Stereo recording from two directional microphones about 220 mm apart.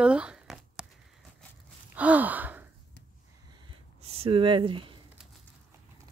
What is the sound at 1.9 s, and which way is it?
Gasp, 5° right (ahead or behind).